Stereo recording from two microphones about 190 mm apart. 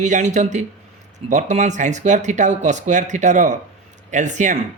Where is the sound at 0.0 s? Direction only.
40° right (ahead or behind).